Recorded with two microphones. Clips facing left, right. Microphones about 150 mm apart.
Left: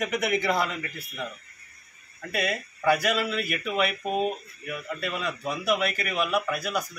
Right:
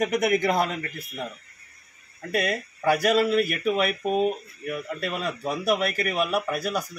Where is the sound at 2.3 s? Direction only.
40° right (ahead or behind).